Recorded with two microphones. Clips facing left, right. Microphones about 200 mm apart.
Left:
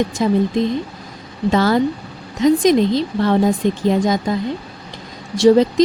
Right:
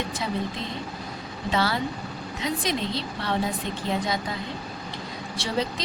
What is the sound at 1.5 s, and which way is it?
Speech, 45° left (ahead or behind).